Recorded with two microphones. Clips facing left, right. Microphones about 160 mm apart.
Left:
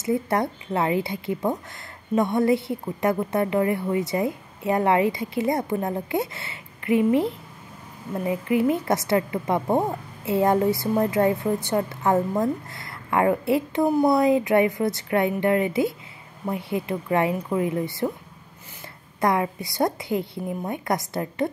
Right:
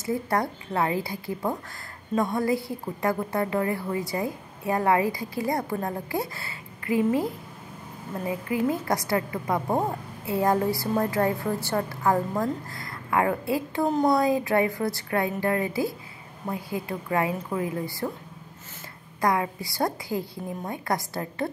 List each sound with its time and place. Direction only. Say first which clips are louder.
0.0 s a woman's voice: left 3 dB; 20° left (ahead or behind)
8.6 s a woman's voice: left 3 dB; 25° left (ahead or behind)
13.8 s speech: left 2 dB; 10° left (ahead or behind)
14.1 s a woman's voice: left 4 dB; 20° left (ahead or behind)
19.2 s a woman's voice: left 2 dB; 25° left (ahead or behind)